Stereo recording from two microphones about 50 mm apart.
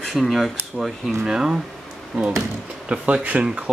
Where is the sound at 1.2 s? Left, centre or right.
Centre.